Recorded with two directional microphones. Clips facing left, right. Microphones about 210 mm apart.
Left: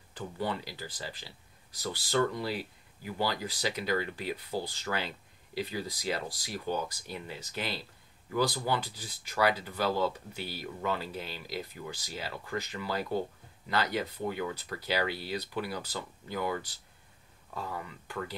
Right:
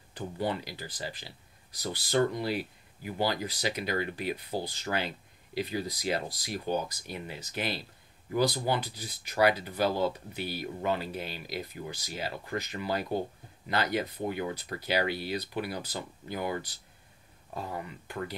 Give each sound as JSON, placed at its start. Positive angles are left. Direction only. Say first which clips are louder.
{"t": 0.4, "sound": "speech", "louder": "right 2 dB", "side_deg": -15}